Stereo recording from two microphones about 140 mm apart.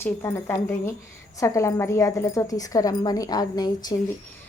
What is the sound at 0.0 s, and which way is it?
A woman's voice, 20° left (ahead or behind).